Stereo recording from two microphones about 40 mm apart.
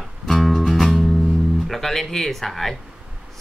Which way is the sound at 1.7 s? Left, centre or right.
Centre.